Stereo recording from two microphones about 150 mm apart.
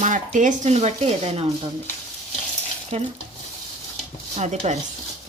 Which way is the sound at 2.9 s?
45° right (ahead or behind).